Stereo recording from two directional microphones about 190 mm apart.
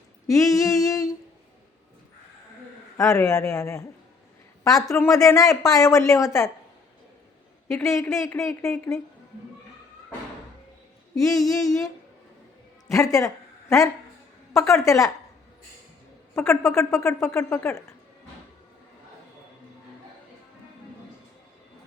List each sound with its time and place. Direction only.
0.3 s female singing: 15° left (ahead or behind)
3.0 s a woman's voice: 15° left (ahead or behind)
4.9 s a woman's voice: 15° left (ahead or behind)
7.8 s a woman's voice: 15° left (ahead or behind)
11.1 s a woman's voice: 15° left (ahead or behind)
12.9 s a woman's voice: 15° left (ahead or behind)
16.3 s a woman's voice: 10° left (ahead or behind)